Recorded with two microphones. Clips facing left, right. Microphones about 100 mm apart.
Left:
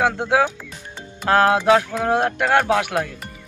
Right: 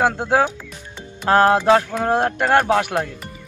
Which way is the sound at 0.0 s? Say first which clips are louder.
Right 1 dB; centre (ahead or behind).